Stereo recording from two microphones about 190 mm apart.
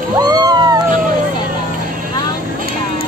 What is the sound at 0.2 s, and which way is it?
Cat, 20° right (ahead or behind).